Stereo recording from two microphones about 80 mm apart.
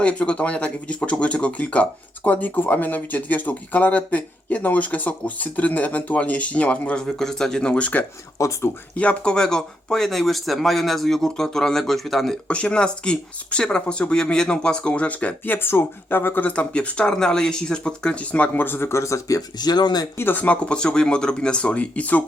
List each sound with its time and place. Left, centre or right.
0.0 s speech: centre
8.4 s speech: left
9.0 s speech: centre
15.5 s speech: left
16.5 s speech: centre; by 19.4 s left
19.5 s speech: left
20.1 s speech: left